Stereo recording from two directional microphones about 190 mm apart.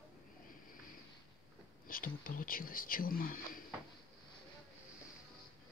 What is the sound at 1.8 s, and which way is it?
Speech, 50° left (ahead or behind).